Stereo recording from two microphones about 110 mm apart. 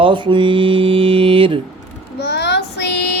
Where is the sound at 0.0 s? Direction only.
50° right (ahead or behind).